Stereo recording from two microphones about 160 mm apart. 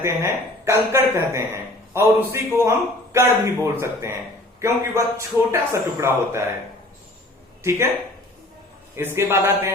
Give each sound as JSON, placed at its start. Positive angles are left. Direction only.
{"t": 0.0, "sound": "a man's voice", "side_deg": -15}
{"t": 7.6, "sound": "speech", "side_deg": -15}
{"t": 9.1, "sound": "a man's voice", "side_deg": -15}